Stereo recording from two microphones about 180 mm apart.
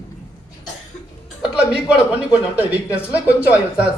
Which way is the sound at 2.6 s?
10° right (ahead or behind).